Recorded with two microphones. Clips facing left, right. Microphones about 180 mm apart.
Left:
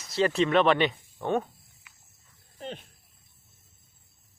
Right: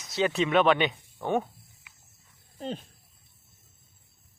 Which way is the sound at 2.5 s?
35° right (ahead or behind).